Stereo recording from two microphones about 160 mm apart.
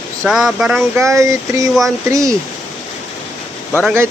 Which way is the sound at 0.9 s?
20° right (ahead or behind).